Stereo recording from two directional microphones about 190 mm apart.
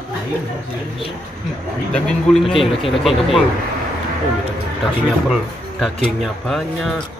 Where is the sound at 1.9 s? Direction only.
5° left (ahead or behind).